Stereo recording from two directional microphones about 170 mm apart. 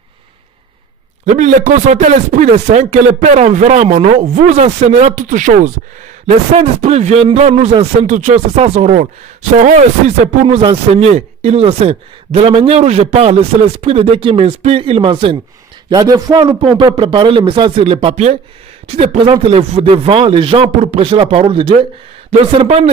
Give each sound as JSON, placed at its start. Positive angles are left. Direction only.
{"t": 1.2, "sound": "a man's voice", "side_deg": -45}
{"t": 15.9, "sound": "a man's voice", "side_deg": -20}